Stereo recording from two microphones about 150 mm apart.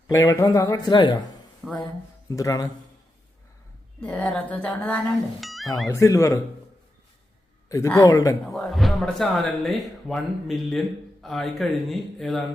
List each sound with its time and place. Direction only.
0.1 s speech: 25° left (ahead or behind)
1.6 s a woman's voice: 5° left (ahead or behind)
2.3 s speech: 20° left (ahead or behind)
4.0 s a woman's voice: 10° left (ahead or behind)
5.9 s speech: 20° left (ahead or behind)
7.7 s speech: 20° left (ahead or behind)
8.5 s speech: centre (ahead or behind)